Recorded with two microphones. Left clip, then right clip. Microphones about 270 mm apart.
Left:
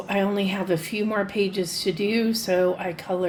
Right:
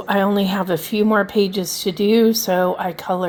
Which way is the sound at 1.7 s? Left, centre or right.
Right.